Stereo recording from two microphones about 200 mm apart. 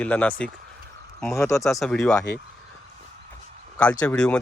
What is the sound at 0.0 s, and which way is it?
Speech, 5° left (ahead or behind).